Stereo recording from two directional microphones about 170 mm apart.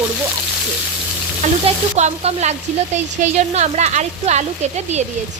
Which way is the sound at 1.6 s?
40° right (ahead or behind).